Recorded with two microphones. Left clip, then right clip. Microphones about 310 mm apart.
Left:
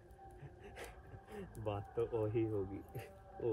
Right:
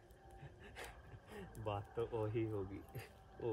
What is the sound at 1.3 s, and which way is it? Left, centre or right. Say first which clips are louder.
Speech: left 2 dB; centre.